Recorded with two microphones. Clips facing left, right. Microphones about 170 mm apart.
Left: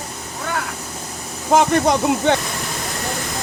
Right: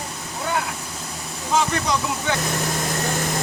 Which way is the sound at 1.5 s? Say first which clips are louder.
Left 7 dB; 60° left (ahead or behind).